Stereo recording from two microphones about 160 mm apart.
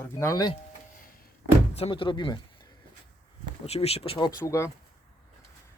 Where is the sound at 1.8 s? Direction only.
30° left (ahead or behind).